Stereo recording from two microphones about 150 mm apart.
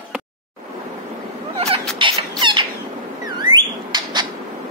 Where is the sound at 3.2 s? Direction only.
30° right (ahead or behind).